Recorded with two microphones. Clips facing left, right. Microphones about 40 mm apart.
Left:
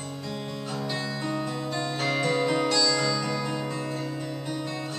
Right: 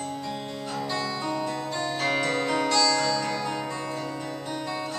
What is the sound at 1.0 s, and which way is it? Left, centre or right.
Music, left.